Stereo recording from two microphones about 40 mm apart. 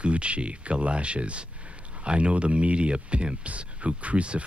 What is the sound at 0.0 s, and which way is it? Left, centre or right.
Speech, right.